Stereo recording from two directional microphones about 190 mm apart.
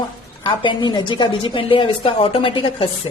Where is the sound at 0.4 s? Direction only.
25° left (ahead or behind).